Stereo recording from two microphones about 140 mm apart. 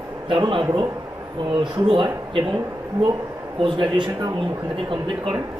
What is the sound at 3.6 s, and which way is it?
A man's voice, 35° right (ahead or behind).